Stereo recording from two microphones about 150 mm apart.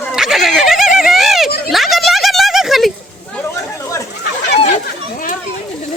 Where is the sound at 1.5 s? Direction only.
90° left.